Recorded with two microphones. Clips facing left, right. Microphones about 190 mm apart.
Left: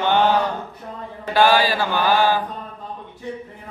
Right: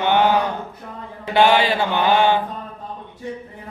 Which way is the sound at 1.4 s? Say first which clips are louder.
Right 1 dB; 25° right (ahead or behind).